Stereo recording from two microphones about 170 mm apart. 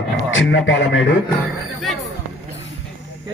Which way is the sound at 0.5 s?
90° left.